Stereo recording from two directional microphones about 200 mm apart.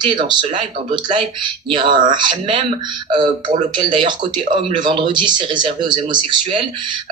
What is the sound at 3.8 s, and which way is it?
Speech, 25° right (ahead or behind).